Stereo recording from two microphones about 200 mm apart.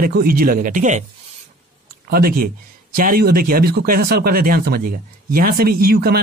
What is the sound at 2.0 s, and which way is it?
Speech, 50° right (ahead or behind).